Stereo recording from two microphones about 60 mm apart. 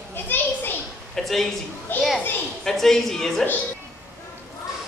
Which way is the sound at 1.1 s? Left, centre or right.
Centre.